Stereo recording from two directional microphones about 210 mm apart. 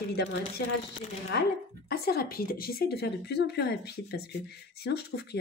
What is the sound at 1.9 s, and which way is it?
Speech, 45° left (ahead or behind).